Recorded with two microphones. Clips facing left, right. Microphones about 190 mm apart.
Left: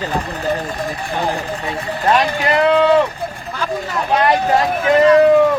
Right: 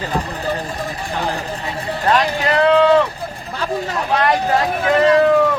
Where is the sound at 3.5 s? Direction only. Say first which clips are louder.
Right 1 dB; 35° right (ahead or behind).